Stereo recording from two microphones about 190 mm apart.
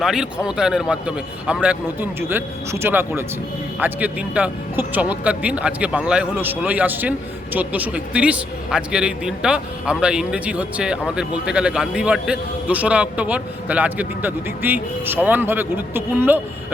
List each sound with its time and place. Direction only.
0.0 s a man's voice: 5° right (ahead or behind)